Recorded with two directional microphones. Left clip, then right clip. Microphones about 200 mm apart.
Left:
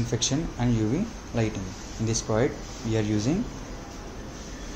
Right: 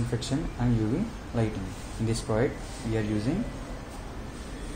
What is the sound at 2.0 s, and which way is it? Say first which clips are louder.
Speech: left 2 dB; 15° left (ahead or behind).